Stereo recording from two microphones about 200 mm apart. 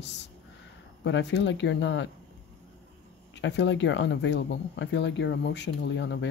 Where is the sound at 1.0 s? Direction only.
65° left (ahead or behind).